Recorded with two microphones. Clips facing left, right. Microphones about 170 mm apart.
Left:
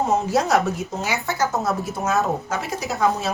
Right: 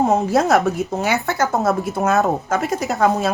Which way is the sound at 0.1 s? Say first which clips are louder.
Right 3 dB; 60° right (ahead or behind).